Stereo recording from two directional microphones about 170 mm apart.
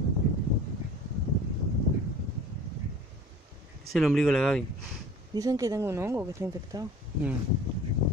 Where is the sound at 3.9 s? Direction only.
Centre (ahead or behind).